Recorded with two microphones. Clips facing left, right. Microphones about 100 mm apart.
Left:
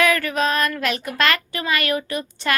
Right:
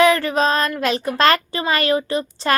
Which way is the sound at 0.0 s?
25° right (ahead or behind).